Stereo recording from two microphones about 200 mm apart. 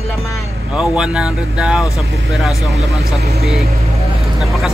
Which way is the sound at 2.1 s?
65° right (ahead or behind).